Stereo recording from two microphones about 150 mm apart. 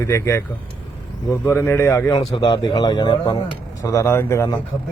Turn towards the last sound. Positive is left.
turn(degrees=20)  # may be behind; listen again after turning